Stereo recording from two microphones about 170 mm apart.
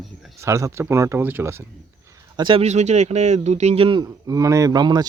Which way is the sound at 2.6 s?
40° right (ahead or behind).